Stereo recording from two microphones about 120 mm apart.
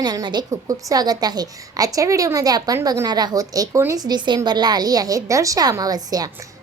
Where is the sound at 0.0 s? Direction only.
35° right (ahead or behind).